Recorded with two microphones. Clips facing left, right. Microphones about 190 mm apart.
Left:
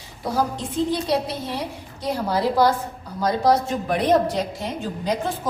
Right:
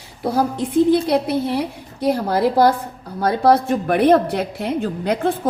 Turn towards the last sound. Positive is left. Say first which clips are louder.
# right 5 dB
turn(degrees=-60)  # may be behind; listen again after turning